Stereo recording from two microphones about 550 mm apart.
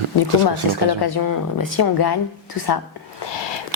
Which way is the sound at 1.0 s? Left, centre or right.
Left.